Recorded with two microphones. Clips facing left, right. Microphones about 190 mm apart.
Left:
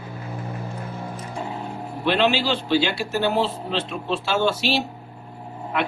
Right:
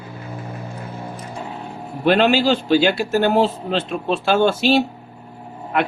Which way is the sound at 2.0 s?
50° right (ahead or behind).